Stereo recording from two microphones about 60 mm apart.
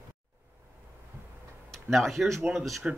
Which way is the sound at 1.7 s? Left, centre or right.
Centre.